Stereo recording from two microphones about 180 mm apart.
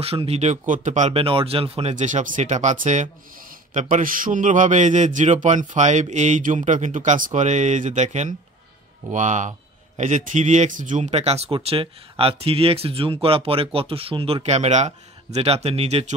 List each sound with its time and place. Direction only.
0.0 s a man's voice: 35° right (ahead or behind)